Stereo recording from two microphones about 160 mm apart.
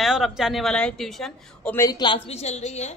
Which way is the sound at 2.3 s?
45° left (ahead or behind).